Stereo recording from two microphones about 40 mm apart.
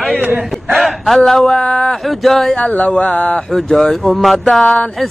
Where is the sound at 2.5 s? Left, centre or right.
Left.